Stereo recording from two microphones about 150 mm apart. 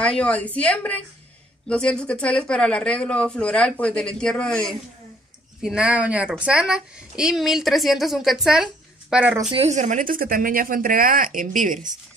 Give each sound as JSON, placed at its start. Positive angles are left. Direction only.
{"t": 0.0, "sound": "a woman's voice", "side_deg": 5}
{"t": 9.5, "sound": "speech", "side_deg": -45}